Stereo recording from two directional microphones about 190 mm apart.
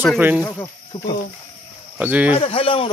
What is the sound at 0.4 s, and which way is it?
Speech, 10° left (ahead or behind).